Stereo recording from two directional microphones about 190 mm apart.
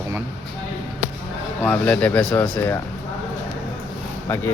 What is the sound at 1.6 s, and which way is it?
Speech, 10° left (ahead or behind).